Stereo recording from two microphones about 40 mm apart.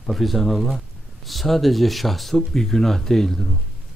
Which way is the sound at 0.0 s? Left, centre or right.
Centre.